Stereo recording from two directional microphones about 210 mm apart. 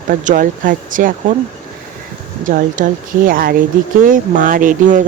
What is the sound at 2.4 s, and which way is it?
Speech, 40° right (ahead or behind).